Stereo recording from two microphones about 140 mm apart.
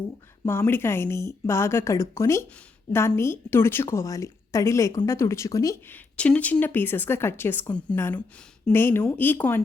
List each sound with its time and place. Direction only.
0.4 s a woman's voice: 15° left (ahead or behind)
5.9 s speech: 10° left (ahead or behind)